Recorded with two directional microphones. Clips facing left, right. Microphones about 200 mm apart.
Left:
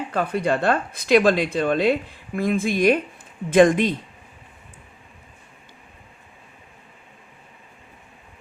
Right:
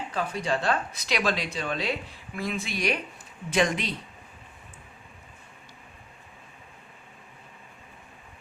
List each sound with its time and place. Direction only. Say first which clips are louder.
0.1 s speech: left 6 dB; 60° left (ahead or behind)